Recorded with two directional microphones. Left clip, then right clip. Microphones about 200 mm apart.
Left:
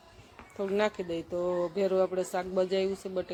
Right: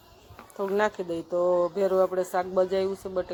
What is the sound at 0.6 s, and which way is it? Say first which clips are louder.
Speech: right 3 dB; 5° left (ahead or behind).